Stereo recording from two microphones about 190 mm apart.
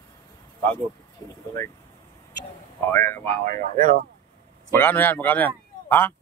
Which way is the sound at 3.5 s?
45° right (ahead or behind).